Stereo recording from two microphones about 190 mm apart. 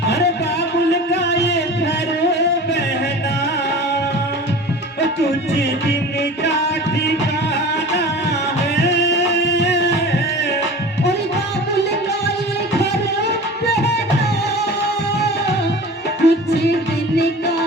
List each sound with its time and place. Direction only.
1.1 s music: 60° left (ahead or behind)
8.8 s music: 60° left (ahead or behind)
16.2 s music: 60° left (ahead or behind)